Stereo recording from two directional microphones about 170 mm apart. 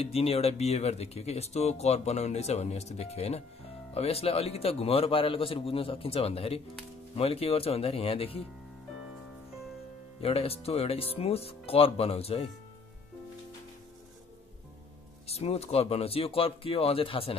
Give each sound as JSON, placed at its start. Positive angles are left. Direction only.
{"t": 0.0, "sound": "speech", "side_deg": 35}
{"t": 10.2, "sound": "speech", "side_deg": 35}
{"t": 15.2, "sound": "speech", "side_deg": 35}